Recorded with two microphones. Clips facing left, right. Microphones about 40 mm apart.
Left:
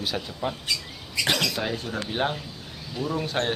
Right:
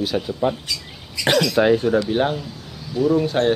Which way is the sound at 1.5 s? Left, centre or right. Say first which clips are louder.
Right 13 dB; right.